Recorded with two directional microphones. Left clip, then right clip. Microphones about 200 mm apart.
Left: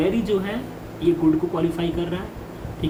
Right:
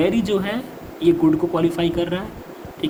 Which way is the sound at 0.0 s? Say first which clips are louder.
Right 2 dB; 60° right (ahead or behind).